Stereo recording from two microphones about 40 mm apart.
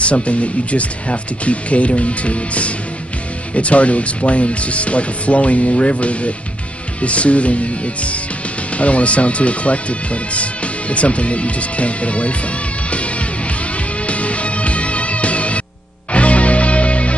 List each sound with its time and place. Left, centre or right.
0.0 s speech: left
12.9 s music: left